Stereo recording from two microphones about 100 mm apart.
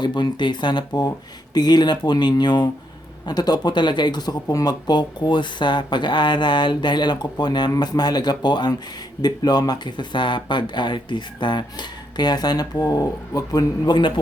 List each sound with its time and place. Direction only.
0.0 s speech: 45° left (ahead or behind)